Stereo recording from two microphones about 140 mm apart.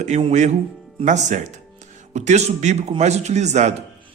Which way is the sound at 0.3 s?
55° right (ahead or behind).